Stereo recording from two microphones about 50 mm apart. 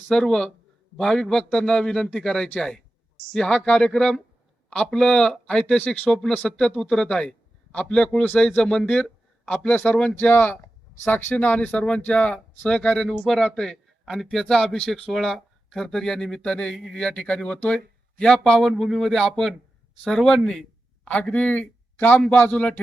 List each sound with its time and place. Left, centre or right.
0.1 s a man's voice: centre
9.5 s speech: left
10.2 s a man's voice: left; by 16.7 s centre
16.7 s speech: centre
17.0 s a man's voice: centre
21.0 s speech: left
21.9 s speech: left
22.3 s speech: left